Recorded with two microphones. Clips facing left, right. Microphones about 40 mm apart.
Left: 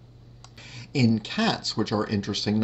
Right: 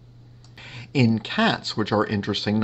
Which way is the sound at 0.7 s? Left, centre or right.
Right.